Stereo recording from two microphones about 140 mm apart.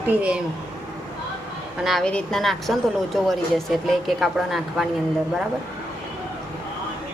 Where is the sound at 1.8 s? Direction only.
5° left (ahead or behind).